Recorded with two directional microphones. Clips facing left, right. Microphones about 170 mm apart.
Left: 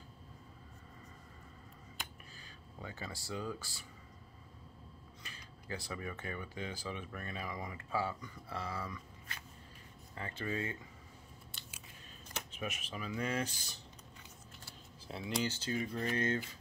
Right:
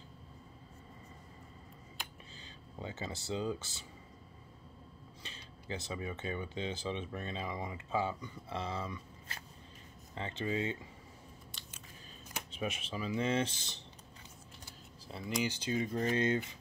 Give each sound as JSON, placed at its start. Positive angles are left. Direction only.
{"t": 2.3, "sound": "speech", "side_deg": -25}
{"t": 5.2, "sound": "speech", "side_deg": -25}
{"t": 12.4, "sound": "speech", "side_deg": -30}
{"t": 15.0, "sound": "speech", "side_deg": 0}
{"t": 15.4, "sound": "speech", "side_deg": -15}